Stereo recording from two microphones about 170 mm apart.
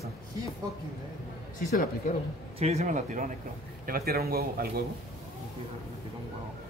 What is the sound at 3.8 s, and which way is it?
Speech, 60° right (ahead or behind).